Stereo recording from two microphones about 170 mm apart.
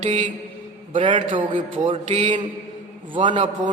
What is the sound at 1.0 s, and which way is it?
A man's voice, 30° right (ahead or behind).